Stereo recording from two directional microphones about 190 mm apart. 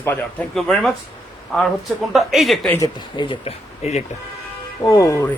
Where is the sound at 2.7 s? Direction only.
20° left (ahead or behind).